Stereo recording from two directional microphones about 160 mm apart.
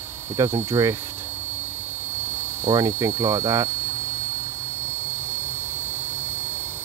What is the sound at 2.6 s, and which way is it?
Speech, 20° right (ahead or behind).